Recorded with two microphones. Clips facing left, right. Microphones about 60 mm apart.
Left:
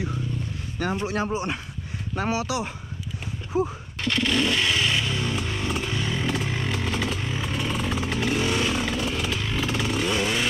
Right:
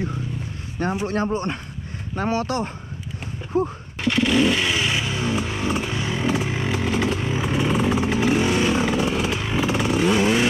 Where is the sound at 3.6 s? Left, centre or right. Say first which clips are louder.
Right 3 dB; centre.